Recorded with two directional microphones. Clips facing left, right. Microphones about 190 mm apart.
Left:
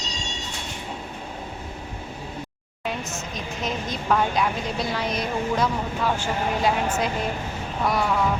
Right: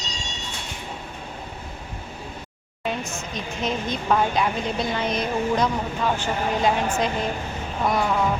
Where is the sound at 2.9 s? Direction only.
Centre (ahead or behind).